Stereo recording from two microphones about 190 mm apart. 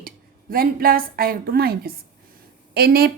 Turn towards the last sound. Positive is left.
turn(degrees=-55)  # may be behind; listen again after turning